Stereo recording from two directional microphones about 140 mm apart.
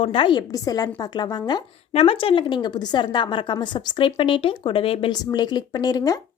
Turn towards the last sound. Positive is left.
turn(degrees=25)  # may be behind; listen again after turning